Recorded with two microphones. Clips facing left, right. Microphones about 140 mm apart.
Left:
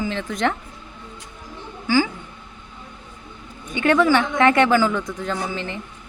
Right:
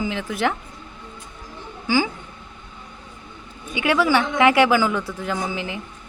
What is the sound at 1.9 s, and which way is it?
Speech, 15° right (ahead or behind).